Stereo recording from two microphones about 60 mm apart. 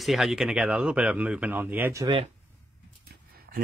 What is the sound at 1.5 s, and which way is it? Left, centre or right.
Speech, right.